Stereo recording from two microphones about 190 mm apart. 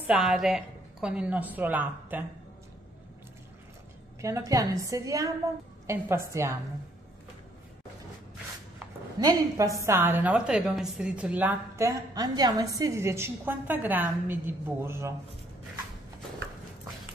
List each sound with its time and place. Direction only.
0.0 s a woman's voice: 5° right (ahead or behind)
4.2 s a woman's voice: 15° right (ahead or behind)
9.2 s a woman's voice: 20° right (ahead or behind)